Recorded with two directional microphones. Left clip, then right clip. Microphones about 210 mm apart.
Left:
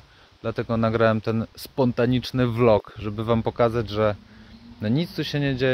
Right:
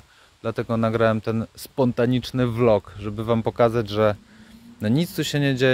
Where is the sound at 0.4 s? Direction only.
10° right (ahead or behind).